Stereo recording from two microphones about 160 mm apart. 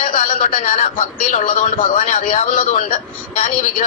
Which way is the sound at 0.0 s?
50° left (ahead or behind).